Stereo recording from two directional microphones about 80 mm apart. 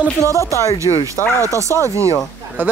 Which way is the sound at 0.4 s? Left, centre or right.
Left.